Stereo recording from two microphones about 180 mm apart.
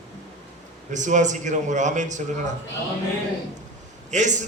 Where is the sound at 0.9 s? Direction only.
45° right (ahead or behind).